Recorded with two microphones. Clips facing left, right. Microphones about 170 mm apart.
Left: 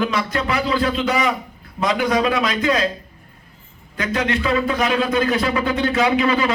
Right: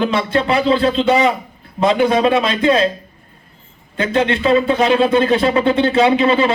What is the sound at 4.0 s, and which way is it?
Speech, 25° right (ahead or behind).